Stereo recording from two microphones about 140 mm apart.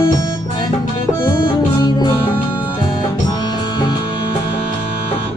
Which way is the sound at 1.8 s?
30° left (ahead or behind).